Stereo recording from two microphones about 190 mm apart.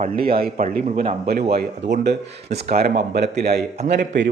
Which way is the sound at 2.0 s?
60° right (ahead or behind).